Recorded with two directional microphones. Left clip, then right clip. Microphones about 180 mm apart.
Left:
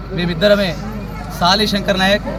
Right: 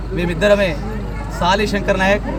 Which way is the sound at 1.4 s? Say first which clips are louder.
Left 2 dB; 40° right (ahead or behind).